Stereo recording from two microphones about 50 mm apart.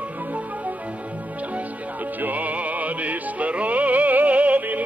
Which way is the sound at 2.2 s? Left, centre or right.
Right.